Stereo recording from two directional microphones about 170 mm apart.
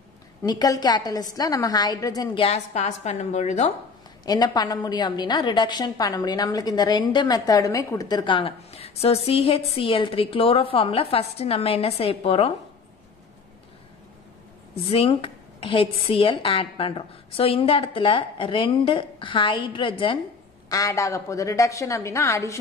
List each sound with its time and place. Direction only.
0.4 s a woman's voice: 20° left (ahead or behind)
2.4 s a woman's voice: 40° left (ahead or behind)
4.3 s a woman's voice: 25° left (ahead or behind)
14.9 s a woman's voice: 35° left (ahead or behind)
20.6 s a woman's voice: 20° left (ahead or behind)